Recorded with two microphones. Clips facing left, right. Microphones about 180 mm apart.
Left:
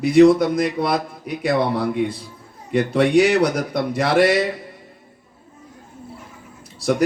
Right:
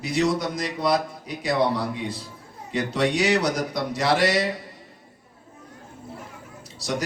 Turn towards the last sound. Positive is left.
turn(degrees=55)  # may be behind; listen again after turning